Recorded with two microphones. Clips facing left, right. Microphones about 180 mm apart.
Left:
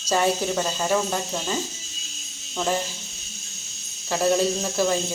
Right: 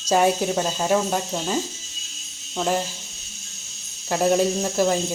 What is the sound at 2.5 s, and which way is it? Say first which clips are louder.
Speech: right 2 dB; 10° right (ahead or behind).